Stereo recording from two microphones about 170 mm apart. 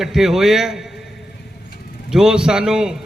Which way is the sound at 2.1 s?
5° right (ahead or behind).